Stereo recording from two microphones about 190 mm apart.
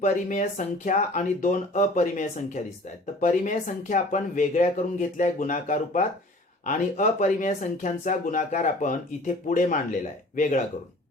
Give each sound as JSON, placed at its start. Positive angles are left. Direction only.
{"t": 0.0, "sound": "speech", "side_deg": 40}